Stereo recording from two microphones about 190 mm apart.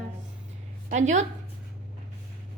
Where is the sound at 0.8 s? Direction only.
40° right (ahead or behind).